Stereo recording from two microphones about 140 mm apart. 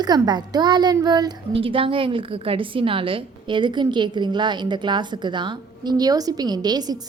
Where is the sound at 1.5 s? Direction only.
40° right (ahead or behind).